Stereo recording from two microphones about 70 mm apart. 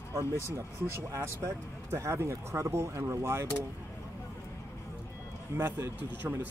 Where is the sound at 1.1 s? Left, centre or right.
Right.